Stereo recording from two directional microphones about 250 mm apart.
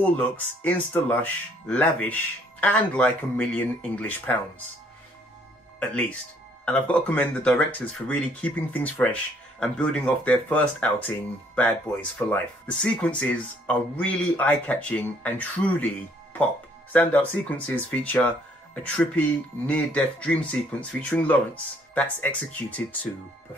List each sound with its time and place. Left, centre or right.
0.7 s speech: centre
5.8 s speech: centre
16.9 s speech: centre